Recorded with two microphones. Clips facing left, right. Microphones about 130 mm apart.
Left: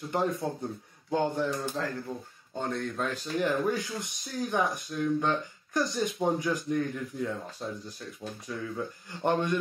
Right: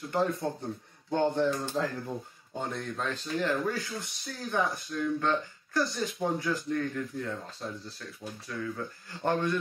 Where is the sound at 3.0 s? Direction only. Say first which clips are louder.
Left 1 dB; 15° left (ahead or behind).